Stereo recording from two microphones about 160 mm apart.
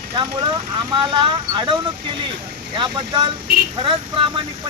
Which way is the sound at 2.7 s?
30° right (ahead or behind).